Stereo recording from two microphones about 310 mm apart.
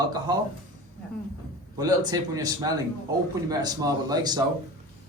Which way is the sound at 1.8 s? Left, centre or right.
Centre.